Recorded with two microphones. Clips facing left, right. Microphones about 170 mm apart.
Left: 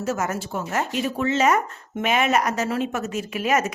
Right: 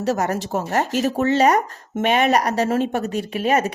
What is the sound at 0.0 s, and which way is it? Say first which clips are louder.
Speech: right 4 dB; 35° right (ahead or behind).